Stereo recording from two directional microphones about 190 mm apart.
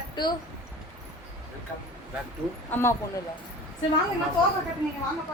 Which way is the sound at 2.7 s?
15° left (ahead or behind).